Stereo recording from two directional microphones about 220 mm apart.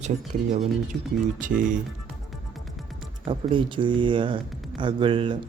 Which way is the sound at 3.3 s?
20° right (ahead or behind).